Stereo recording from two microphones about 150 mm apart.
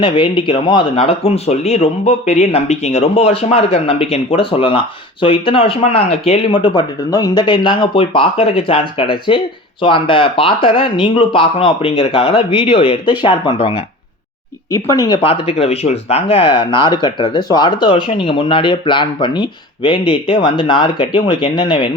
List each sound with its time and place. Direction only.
0.0 s speech: 35° left (ahead or behind)
15.0 s speech: 30° left (ahead or behind)